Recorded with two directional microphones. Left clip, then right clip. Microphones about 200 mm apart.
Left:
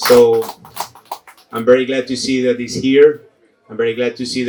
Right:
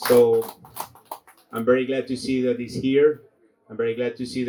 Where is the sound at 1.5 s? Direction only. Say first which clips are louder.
Left 8 dB; 45° left (ahead or behind).